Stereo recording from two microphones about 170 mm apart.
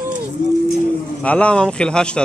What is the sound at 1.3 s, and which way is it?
Speech, 5° left (ahead or behind).